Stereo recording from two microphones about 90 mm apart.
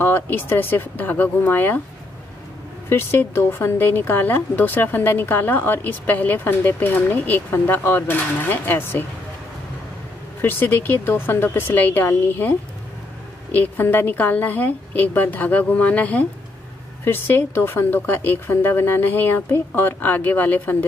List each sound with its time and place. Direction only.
0.0 s speech: 25° left (ahead or behind)
2.9 s speech: 30° left (ahead or behind)
10.4 s speech: 25° left (ahead or behind)